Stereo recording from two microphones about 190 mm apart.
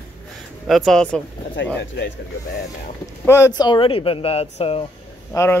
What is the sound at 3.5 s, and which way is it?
Speech, 25° left (ahead or behind).